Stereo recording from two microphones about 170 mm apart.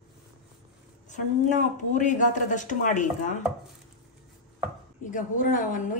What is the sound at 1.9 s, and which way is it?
Chopping, 45° left (ahead or behind).